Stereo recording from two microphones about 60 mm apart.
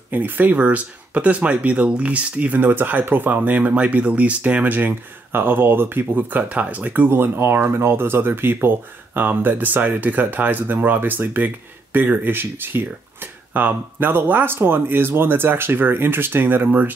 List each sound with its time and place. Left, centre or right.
0.1 s speech: right
7.1 s speech: right